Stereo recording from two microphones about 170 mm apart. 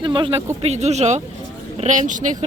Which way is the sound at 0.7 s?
40° right (ahead or behind).